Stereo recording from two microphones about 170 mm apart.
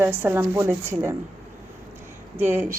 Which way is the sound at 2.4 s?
10° right (ahead or behind).